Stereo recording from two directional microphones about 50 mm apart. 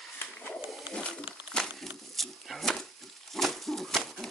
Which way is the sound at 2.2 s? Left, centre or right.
Centre.